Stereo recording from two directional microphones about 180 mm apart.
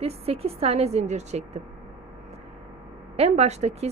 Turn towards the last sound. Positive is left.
turn(degrees=-40)  # may be behind; listen again after turning